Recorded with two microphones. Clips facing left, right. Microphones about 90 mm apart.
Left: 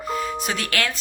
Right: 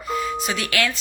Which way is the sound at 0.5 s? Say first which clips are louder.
Right 2 dB; 45° left (ahead or behind).